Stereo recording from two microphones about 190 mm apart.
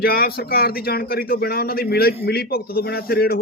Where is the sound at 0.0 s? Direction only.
50° left (ahead or behind).